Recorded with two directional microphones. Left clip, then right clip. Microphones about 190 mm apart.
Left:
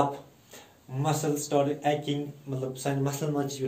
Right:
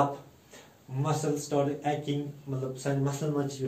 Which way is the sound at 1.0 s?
20° right (ahead or behind).